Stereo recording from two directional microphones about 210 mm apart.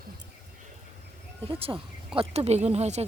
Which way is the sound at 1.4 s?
25° right (ahead or behind).